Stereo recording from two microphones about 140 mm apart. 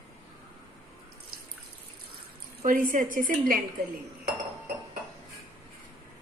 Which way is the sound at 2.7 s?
80° right.